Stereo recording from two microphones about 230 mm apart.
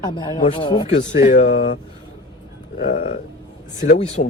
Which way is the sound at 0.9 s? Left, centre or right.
Left.